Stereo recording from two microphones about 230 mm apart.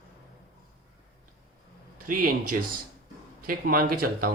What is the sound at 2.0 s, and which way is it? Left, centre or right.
Speech, right.